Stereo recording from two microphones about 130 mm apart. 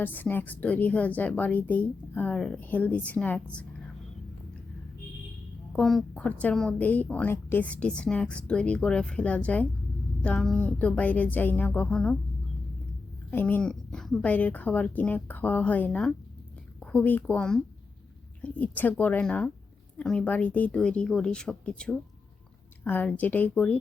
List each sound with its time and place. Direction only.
0.0 s a woman's voice: 15° left (ahead or behind)
5.7 s a woman's voice: centre (ahead or behind)
13.3 s a woman's voice: 15° left (ahead or behind)